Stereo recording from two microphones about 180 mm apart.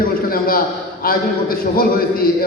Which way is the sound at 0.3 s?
55° left (ahead or behind).